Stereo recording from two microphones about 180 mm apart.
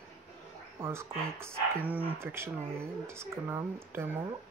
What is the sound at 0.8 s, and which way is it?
Speech, 15° right (ahead or behind).